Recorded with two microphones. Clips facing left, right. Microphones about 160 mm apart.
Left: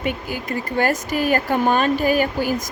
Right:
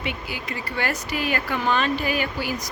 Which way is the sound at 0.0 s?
45° left (ahead or behind).